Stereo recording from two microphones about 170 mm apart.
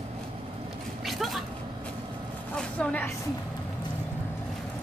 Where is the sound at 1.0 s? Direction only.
Centre (ahead or behind).